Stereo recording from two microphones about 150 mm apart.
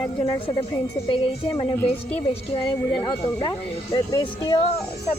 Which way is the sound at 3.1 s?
30° left (ahead or behind).